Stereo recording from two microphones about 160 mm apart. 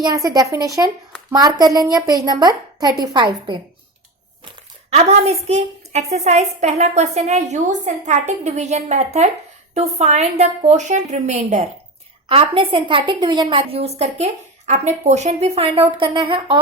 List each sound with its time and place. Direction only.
0.0 s speech: 25° right (ahead or behind)
4.9 s a woman's voice: 40° right (ahead or behind)
12.3 s a woman's voice: 35° right (ahead or behind)